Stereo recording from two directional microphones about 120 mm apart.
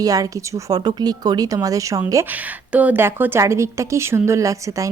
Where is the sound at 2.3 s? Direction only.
15° right (ahead or behind).